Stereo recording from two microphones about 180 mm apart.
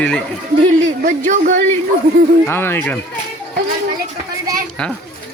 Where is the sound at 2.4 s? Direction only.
10° left (ahead or behind).